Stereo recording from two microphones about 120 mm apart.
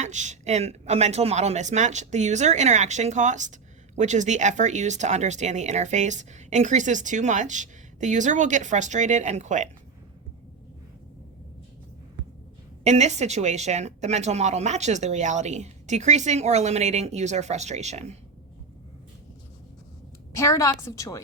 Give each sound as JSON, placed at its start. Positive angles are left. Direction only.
{"t": 0.0, "sound": "speech", "side_deg": -80}
{"t": 12.8, "sound": "speech", "side_deg": -70}
{"t": 20.3, "sound": "a woman's voice", "side_deg": 25}